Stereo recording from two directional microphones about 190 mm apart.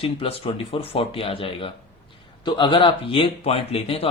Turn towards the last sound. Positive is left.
turn(degrees=30)  # may be behind; listen again after turning